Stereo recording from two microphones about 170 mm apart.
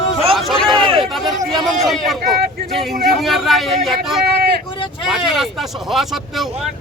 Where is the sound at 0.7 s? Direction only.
30° right (ahead or behind).